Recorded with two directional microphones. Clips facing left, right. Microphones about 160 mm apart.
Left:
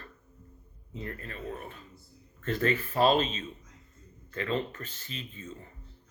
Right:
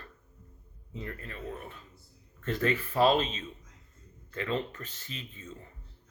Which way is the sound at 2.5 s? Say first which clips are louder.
Left 1 dB; 40° left (ahead or behind).